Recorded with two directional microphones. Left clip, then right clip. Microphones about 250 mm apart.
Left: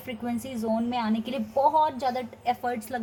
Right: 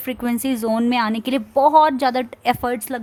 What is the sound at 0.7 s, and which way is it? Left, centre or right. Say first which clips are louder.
Speech: right 7 dB; right.